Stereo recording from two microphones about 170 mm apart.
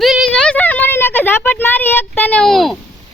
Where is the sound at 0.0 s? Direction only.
Centre (ahead or behind).